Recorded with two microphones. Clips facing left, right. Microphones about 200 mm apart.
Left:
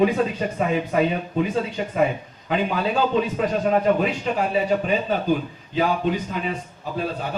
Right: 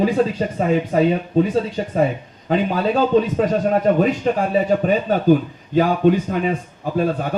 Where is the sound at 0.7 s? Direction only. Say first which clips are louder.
Right 6 dB; 35° right (ahead or behind).